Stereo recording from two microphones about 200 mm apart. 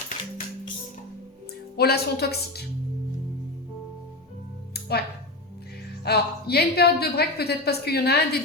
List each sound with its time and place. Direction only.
1.7 s a woman's voice: 50° left (ahead or behind)
4.7 s music: 55° left (ahead or behind)
6.1 s a woman's voice: 55° left (ahead or behind)